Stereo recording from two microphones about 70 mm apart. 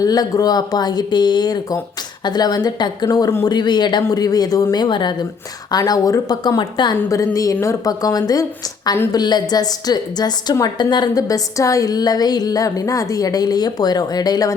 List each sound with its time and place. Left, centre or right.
0.0 s a woman's voice: left
3.1 s speech: left
3.4 s speech: left
4.1 s a woman's voice: left
5.7 s a woman's voice: left
6.4 s speech: left
7.3 s speech: left
7.9 s a woman's voice: left
9.1 s a woman's voice: left
11.9 s a woman's voice: left